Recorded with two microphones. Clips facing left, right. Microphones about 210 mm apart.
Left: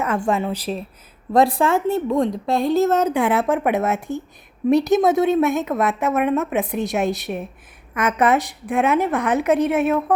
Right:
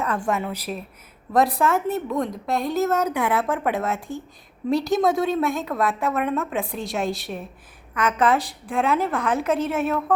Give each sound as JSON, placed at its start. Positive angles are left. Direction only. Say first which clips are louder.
{"t": 0.3, "sound": "a woman's voice", "louder": "left 4 dB", "side_deg": 30}